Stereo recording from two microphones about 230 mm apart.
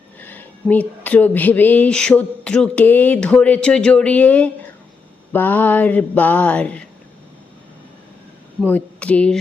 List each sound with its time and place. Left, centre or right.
0.2 s speech: centre
8.6 s speech: centre